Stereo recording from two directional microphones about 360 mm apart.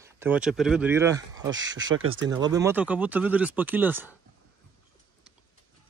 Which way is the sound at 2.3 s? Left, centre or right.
Centre.